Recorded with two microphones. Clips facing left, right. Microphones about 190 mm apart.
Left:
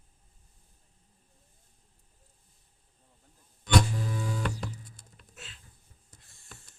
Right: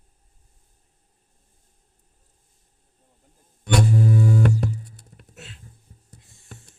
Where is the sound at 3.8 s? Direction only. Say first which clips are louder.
Right 13 dB; 40° right (ahead or behind).